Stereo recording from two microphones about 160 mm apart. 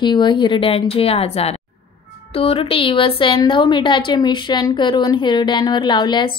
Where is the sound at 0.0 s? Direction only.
30° left (ahead or behind).